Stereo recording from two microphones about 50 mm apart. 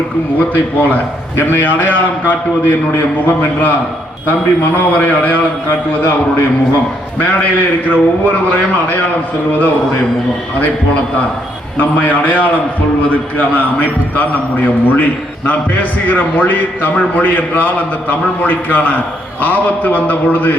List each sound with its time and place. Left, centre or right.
0.3 s a man's voice: left
3.2 s a man's voice: left
7.2 s a man's voice: left
11.8 s a man's voice: left